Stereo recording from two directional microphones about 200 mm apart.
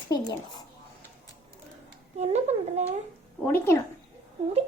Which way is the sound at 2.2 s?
35° right (ahead or behind).